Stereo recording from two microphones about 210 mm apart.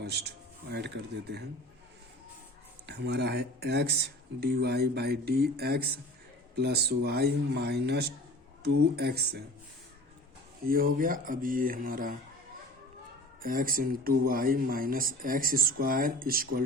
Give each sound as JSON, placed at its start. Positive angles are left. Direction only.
{"t": 0.0, "sound": "speech", "side_deg": -50}
{"t": 2.8, "sound": "speech", "side_deg": -55}
{"t": 10.7, "sound": "speech", "side_deg": -45}
{"t": 13.4, "sound": "speech", "side_deg": -40}